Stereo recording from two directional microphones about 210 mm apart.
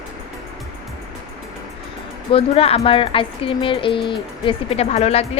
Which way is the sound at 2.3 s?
30° left (ahead or behind).